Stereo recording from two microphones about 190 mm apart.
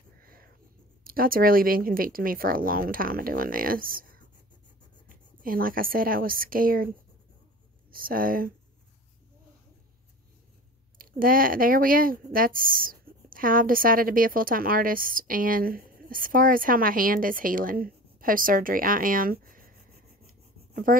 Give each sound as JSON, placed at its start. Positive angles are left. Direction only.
{"t": 0.2, "sound": "a sound", "side_deg": -50}
{"t": 1.0, "sound": "speech", "side_deg": -50}
{"t": 5.1, "sound": "a woman's voice", "side_deg": -50}
{"t": 7.9, "sound": "speech", "side_deg": -50}
{"t": 11.0, "sound": "speech", "side_deg": -50}